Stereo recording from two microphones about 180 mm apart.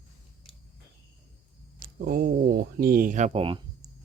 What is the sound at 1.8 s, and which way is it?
Speech, 55° right (ahead or behind).